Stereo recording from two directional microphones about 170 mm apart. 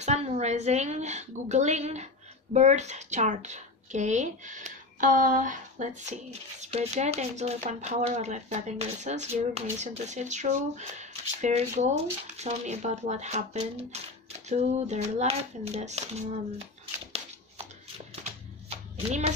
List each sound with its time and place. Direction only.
0.0 s a woman's voice: 40° right (ahead or behind)